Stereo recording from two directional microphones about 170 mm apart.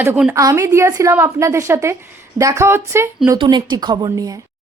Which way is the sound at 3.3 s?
25° right (ahead or behind).